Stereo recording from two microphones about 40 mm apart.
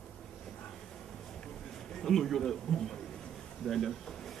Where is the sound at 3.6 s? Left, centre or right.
Centre.